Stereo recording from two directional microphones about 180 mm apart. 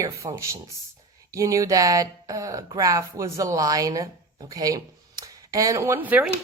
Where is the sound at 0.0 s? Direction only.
20° right (ahead or behind).